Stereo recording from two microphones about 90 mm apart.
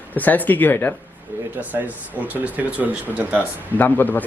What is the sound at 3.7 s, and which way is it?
Speech, 20° left (ahead or behind).